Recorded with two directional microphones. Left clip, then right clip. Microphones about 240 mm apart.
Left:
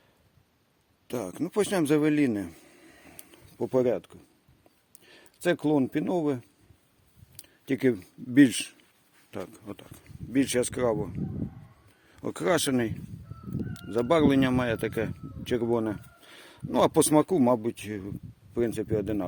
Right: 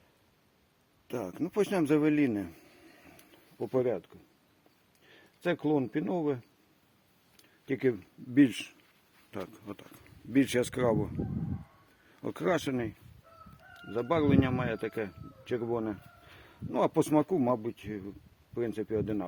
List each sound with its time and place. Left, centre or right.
1.0 s a man's voice: left
3.6 s speech: left
9.3 s speech: left
12.1 s speech: left